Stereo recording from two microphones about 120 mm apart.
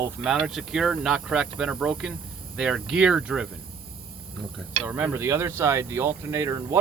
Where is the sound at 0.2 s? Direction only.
5° right (ahead or behind).